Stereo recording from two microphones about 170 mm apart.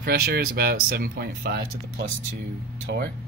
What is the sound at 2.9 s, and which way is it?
Speech, 80° right.